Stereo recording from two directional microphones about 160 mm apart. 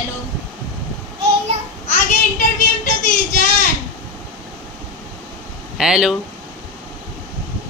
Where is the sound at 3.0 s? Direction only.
55° left (ahead or behind).